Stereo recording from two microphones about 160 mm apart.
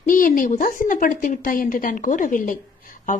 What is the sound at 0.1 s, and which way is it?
A woman's voice, 55° left (ahead or behind).